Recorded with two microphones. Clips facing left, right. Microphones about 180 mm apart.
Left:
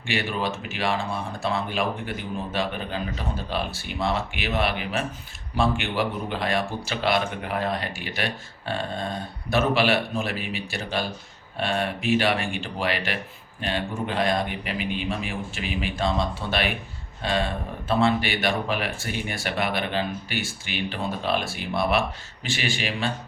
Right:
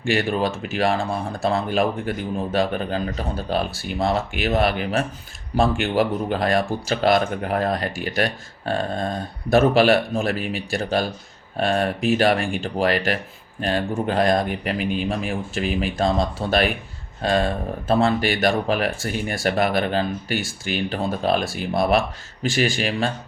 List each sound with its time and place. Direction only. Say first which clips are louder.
0.0 s speech: right 6 dB; 45° right (ahead or behind)